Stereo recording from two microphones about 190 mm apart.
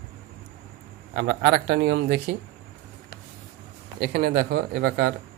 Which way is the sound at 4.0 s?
55° right (ahead or behind).